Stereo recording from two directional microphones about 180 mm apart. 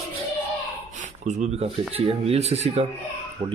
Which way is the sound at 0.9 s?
40° right (ahead or behind).